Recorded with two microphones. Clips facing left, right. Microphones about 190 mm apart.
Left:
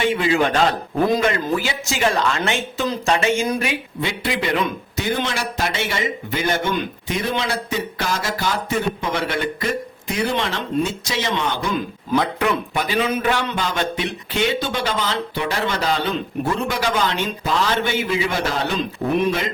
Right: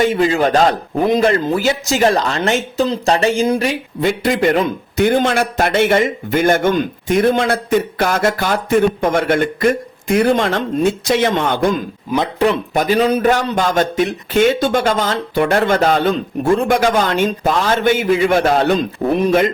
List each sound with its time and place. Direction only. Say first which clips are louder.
0.0 s speech: right 4 dB; 40° right (ahead or behind)
4.0 s a man's voice: right 10 dB; 45° right (ahead or behind)
19.1 s speech: right 5 dB; 40° right (ahead or behind)